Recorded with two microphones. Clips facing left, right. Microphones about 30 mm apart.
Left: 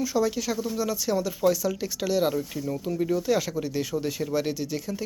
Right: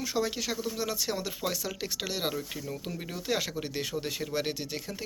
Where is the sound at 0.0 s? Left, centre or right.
Right.